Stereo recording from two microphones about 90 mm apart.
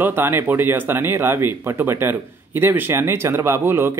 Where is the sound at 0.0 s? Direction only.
25° right (ahead or behind).